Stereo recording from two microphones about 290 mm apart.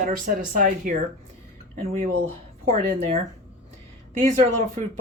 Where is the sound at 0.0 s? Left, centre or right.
Right.